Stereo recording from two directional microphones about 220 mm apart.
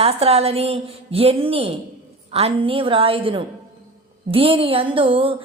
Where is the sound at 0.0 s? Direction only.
25° right (ahead or behind).